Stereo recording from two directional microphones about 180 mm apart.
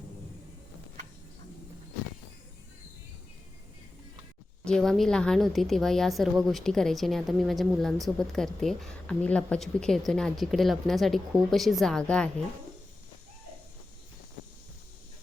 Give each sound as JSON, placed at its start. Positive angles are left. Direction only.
{"t": 4.6, "sound": "a woman's voice", "side_deg": 5}